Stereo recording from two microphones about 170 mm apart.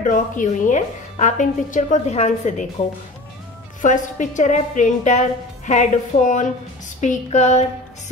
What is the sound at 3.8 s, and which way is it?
A woman's voice, 45° left (ahead or behind).